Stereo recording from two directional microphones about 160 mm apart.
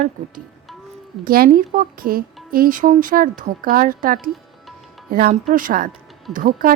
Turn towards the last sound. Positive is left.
turn(degrees=-55)  # may be behind; listen again after turning